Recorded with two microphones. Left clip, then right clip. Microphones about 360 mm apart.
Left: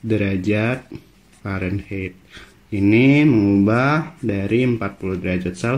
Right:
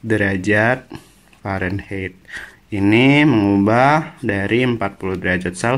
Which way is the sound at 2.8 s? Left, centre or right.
Centre.